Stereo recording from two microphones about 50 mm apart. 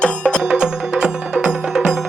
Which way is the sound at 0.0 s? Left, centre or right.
Centre.